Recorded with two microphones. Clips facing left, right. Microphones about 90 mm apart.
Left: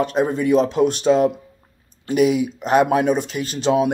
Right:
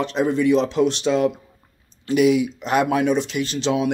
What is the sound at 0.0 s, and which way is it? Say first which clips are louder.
Speech: even; 40° left (ahead or behind).